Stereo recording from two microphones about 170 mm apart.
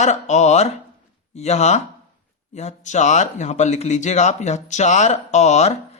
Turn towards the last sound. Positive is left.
turn(degrees=40)  # may be behind; listen again after turning